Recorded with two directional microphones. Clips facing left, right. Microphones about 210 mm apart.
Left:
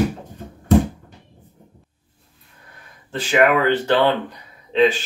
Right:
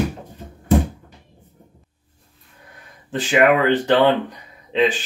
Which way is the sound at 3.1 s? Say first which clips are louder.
Right 1 dB; 15° right (ahead or behind).